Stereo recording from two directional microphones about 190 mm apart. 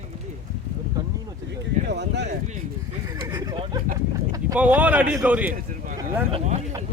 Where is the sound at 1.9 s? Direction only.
60° right (ahead or behind).